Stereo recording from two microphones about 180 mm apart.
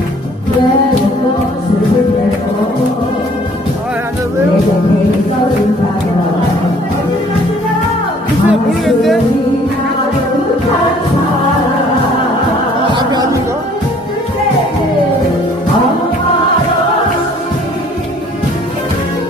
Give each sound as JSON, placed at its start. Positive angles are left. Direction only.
{"t": 8.5, "sound": "music", "side_deg": 0}
{"t": 12.9, "sound": "music", "side_deg": -25}